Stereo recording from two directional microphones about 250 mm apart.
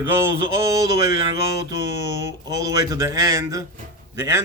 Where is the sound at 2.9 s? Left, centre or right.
Centre.